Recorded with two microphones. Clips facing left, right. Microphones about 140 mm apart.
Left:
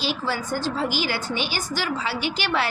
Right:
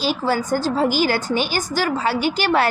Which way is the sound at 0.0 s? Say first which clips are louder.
Right 6 dB; 45° right (ahead or behind).